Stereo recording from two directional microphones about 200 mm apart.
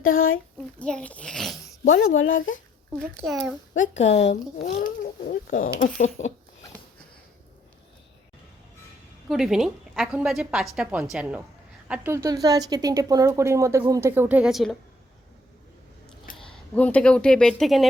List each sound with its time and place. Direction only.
0.0 s a child's voice: 90° left
0.8 s a woman's voice: 5° left (ahead or behind)
1.8 s speech: 40° left (ahead or behind)
2.1 s speech: 75° left (ahead or behind)
3.2 s a woman's voice: centre (ahead or behind)
4.2 s speech: 35° left (ahead or behind)
9.3 s a woman's voice: centre (ahead or behind)
16.3 s a sound: 40° left (ahead or behind)
16.7 s a woman's voice: 5° left (ahead or behind)